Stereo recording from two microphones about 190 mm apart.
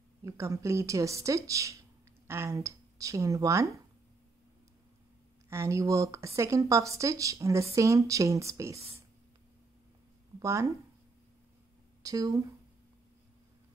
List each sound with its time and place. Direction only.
0.2 s a woman's voice: 15° right (ahead or behind)
5.5 s speech: 15° right (ahead or behind)
10.4 s speech: 15° right (ahead or behind)
12.0 s speech: 20° right (ahead or behind)